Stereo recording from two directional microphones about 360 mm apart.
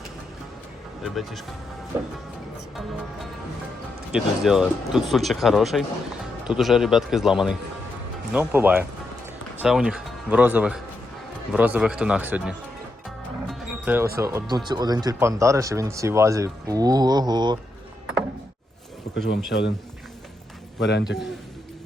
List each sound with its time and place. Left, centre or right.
1.0 s speech: centre
4.1 s speech: centre
13.5 s music: centre
14.2 s speech: centre
19.3 s speech: left
20.7 s a man's voice: left